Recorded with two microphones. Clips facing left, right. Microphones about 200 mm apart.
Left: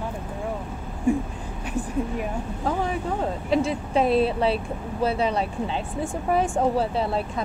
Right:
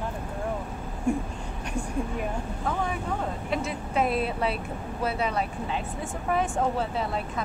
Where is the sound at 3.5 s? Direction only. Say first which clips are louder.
Left 7 dB; 30° left (ahead or behind).